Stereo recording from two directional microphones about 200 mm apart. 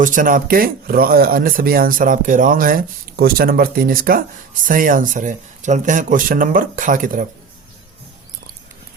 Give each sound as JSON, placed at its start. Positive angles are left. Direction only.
{"t": 0.0, "sound": "speech", "side_deg": -40}